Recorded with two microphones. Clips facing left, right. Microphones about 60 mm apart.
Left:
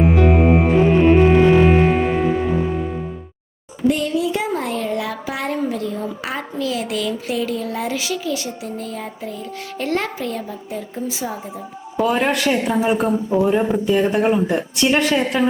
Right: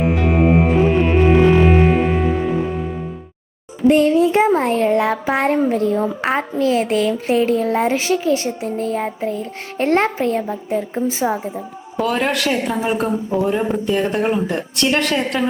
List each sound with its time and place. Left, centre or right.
0.0 s music: centre
3.8 s speech: right
11.9 s a woman's voice: centre